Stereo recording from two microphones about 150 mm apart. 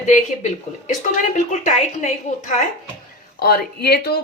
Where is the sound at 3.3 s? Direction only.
90° left.